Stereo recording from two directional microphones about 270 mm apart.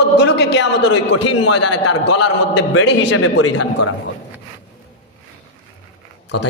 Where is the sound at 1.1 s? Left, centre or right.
Left.